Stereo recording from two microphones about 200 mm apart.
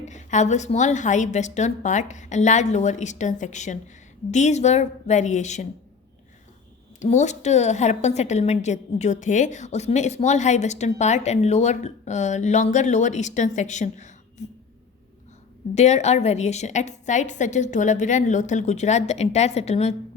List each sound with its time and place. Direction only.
0.0 s a woman's voice: 35° left (ahead or behind)
7.0 s a woman's voice: 35° left (ahead or behind)
15.7 s a woman's voice: 35° left (ahead or behind)